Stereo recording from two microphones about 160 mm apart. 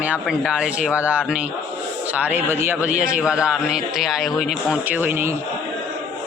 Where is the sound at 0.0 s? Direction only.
5° right (ahead or behind).